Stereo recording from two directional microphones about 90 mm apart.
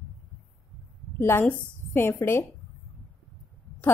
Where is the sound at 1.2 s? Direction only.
25° left (ahead or behind).